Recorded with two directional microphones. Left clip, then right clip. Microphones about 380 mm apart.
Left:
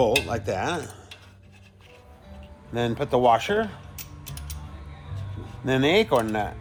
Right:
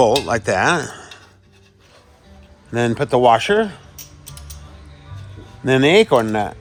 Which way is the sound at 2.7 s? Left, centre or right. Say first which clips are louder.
Right 7 dB; right.